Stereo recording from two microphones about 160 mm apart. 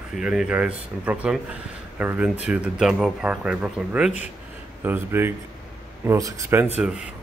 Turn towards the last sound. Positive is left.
turn(degrees=-5)  # may be behind; listen again after turning